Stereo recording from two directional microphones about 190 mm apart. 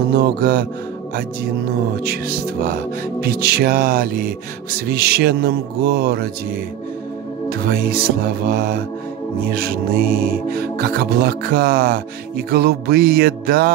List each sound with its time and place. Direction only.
0.1 s music: 55° right (ahead or behind)
2.0 s music: 50° right (ahead or behind)